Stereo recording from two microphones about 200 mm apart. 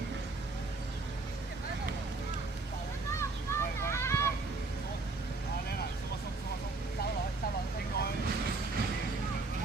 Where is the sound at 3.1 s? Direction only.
15° left (ahead or behind).